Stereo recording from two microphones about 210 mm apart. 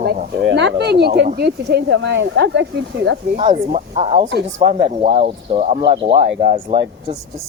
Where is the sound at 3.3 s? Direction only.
30° right (ahead or behind).